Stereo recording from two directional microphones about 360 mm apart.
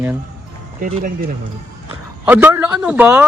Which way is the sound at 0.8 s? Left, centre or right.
Right.